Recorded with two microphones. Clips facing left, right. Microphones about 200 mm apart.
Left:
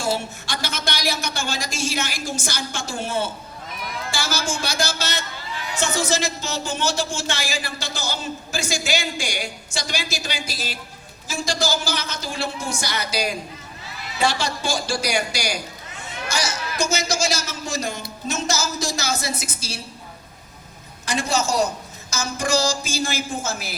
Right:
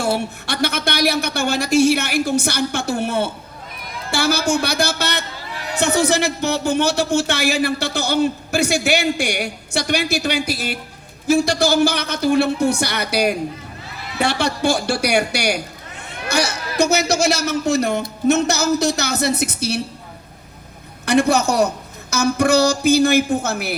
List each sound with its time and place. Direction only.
0.0 s speech: 60° right (ahead or behind)
16.0 s chatter: 60° right (ahead or behind)
16.7 s speech: 60° right (ahead or behind)
21.0 s speech: 60° right (ahead or behind)